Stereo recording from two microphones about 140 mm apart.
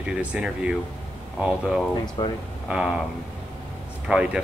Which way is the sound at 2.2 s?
30° left (ahead or behind).